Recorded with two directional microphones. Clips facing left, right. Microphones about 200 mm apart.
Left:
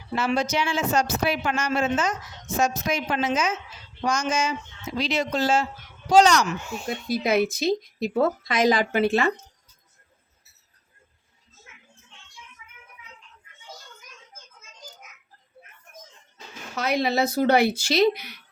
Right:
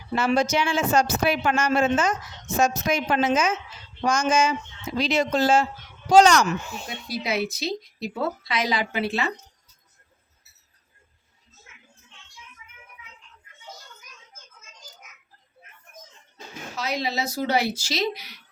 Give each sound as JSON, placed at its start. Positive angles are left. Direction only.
{"t": 0.2, "sound": "speech", "side_deg": -45}
{"t": 6.8, "sound": "speech", "side_deg": 50}
{"t": 16.7, "sound": "speech", "side_deg": 55}